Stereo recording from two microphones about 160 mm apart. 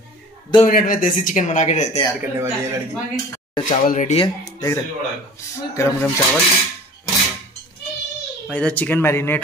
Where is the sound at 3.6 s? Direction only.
55° left (ahead or behind).